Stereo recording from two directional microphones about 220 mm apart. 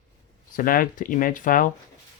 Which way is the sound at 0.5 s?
40° left (ahead or behind).